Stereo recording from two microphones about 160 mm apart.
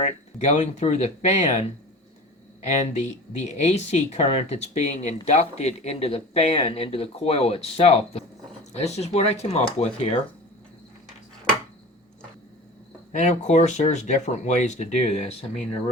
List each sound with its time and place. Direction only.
0.0 s speech: 45° left (ahead or behind)
2.6 s speech: 45° left (ahead or behind)
13.1 s speech: 45° left (ahead or behind)